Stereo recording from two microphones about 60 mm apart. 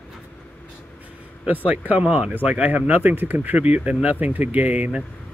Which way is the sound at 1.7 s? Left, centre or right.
Right.